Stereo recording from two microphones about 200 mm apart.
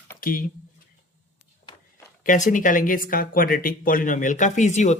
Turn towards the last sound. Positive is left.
turn(degrees=35)  # may be behind; listen again after turning